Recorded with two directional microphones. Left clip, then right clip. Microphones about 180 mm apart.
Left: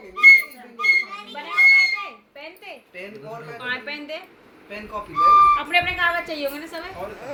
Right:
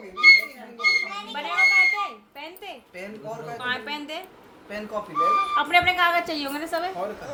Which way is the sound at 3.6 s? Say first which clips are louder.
Left 1 dB; 90° right.